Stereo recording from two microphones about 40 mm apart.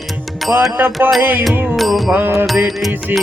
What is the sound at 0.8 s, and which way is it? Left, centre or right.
Music, right.